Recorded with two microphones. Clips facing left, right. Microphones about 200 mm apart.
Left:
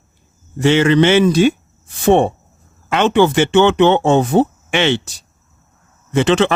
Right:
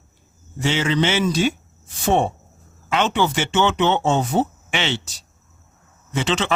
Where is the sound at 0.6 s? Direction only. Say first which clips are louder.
Left 9 dB; 60° left (ahead or behind).